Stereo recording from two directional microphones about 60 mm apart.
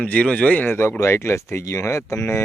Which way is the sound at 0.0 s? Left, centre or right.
Left.